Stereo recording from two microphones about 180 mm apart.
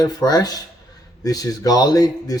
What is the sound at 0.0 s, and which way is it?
Speech, 20° left (ahead or behind).